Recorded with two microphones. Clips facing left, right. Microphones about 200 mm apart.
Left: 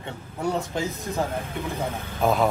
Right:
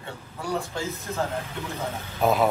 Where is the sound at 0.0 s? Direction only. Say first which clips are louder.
Left 6 dB; 20° left (ahead or behind).